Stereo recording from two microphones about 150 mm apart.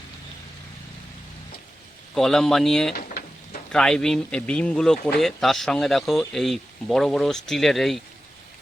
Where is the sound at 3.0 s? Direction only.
80° left.